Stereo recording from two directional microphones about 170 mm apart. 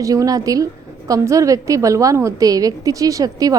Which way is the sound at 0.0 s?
20° right (ahead or behind).